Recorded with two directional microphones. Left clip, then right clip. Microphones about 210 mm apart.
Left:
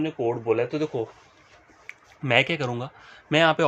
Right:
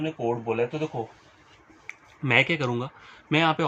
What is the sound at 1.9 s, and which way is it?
Speech, 15° left (ahead or behind).